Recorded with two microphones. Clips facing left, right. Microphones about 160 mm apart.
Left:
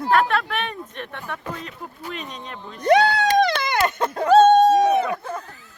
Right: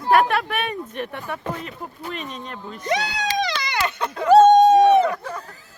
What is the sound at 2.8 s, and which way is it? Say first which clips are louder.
Speech: left 8 dB; 60° left (ahead or behind).